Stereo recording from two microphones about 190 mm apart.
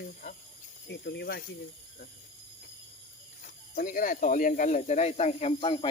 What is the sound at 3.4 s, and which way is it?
Speech, 45° left (ahead or behind).